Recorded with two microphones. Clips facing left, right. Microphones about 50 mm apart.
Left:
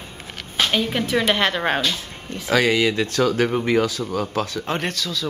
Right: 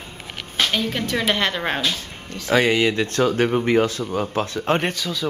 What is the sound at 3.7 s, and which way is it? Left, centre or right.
Speech, right.